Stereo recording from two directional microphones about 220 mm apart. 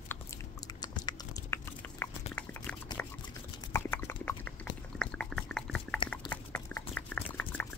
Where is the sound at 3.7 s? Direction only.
10° left (ahead or behind).